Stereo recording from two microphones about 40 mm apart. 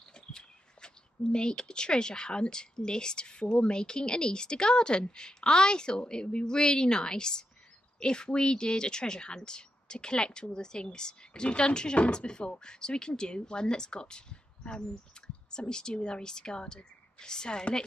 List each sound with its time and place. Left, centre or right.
0.1 s speech: left